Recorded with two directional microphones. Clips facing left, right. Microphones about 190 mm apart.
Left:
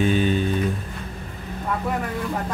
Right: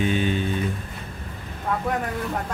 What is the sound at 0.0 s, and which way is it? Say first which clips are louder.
Music: left 3 dB; 40° left (ahead or behind).